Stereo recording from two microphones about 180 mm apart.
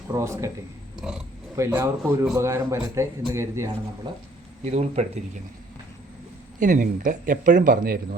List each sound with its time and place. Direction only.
0.1 s a man's voice: 15° right (ahead or behind)
1.0 s speech: 5° right (ahead or behind)
1.5 s a man's voice: 15° right (ahead or behind)
4.6 s speech: 40° right (ahead or behind)
6.6 s speech: 45° right (ahead or behind)